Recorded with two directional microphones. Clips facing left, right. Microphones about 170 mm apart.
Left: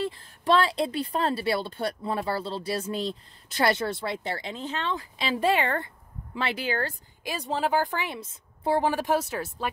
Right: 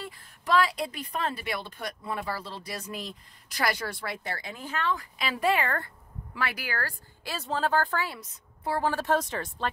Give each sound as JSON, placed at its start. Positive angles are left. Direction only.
{"t": 0.0, "sound": "speech", "side_deg": 25}
{"t": 8.8, "sound": "speech", "side_deg": 10}